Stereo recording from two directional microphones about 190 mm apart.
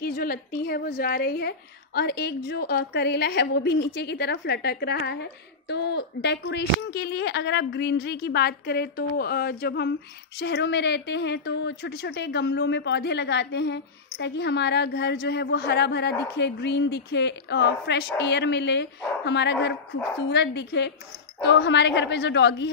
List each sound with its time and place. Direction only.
0.0 s a woman's voice: 50° left (ahead or behind); by 22.7 s 65° left (ahead or behind)